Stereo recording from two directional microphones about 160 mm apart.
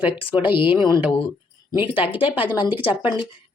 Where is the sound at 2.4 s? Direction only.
10° right (ahead or behind).